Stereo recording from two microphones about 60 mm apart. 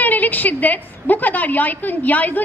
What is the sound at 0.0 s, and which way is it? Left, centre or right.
A woman's voice, left.